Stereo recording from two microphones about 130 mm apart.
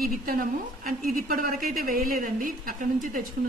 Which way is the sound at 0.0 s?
90° right.